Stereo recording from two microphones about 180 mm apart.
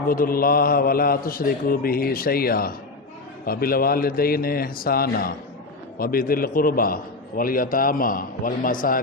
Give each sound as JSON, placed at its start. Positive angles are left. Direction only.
{"t": 0.1, "sound": "a man's voice", "side_deg": 55}